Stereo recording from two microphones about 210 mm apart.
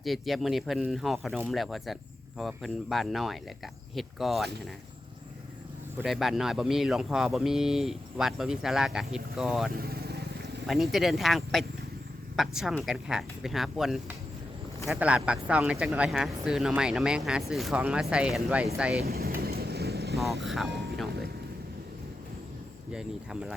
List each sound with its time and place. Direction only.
0.0 s speech: centre (ahead or behind)
6.0 s speech: centre (ahead or behind)
9.7 s vehicle: 45° right (ahead or behind)
10.7 s speech: centre (ahead or behind)
19.0 s vehicle: 45° right (ahead or behind)
22.9 s speech: 5° right (ahead or behind)